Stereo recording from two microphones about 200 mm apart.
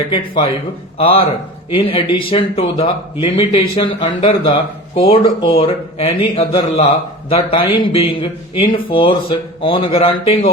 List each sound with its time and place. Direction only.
0.9 s a man's voice: 30° left (ahead or behind)